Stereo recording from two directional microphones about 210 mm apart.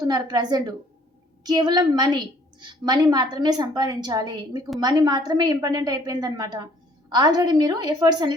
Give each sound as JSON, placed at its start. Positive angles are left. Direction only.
{"t": 0.1, "sound": "a woman's voice", "side_deg": -20}